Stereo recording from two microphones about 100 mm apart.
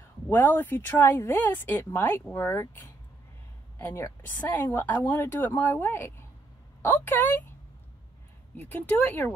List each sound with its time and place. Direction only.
0.3 s a woman's voice: 20° left (ahead or behind)
8.5 s speech: 20° left (ahead or behind)